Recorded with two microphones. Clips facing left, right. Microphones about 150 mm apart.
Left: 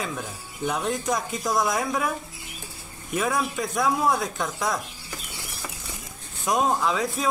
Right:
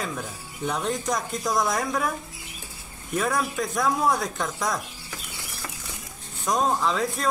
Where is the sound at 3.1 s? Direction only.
Centre (ahead or behind).